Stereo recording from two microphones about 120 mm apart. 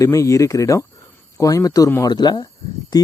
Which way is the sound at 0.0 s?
25° left (ahead or behind).